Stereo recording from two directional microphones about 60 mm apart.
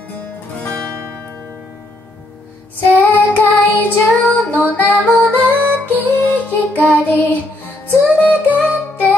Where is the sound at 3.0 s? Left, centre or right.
Left.